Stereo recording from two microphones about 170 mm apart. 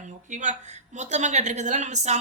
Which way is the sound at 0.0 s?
45° right (ahead or behind).